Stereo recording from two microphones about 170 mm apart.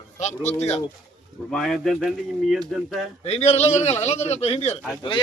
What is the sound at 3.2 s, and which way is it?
A man's voice, 40° left (ahead or behind).